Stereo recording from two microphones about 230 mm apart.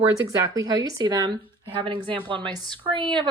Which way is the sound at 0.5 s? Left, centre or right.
Centre.